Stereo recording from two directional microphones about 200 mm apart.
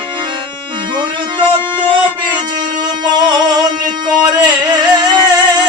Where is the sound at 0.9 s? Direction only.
25° right (ahead or behind).